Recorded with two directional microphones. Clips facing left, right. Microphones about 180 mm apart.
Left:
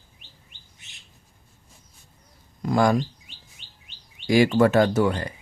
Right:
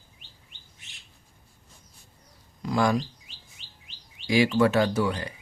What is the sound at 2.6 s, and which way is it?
Speech, 50° left (ahead or behind).